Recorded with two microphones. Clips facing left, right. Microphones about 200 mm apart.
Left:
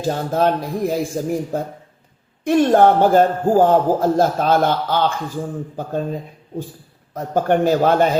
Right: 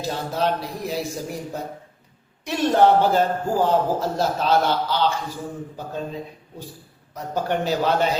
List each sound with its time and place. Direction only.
0.0 s a man's voice: 50° left (ahead or behind)
7.1 s a man's voice: 50° left (ahead or behind)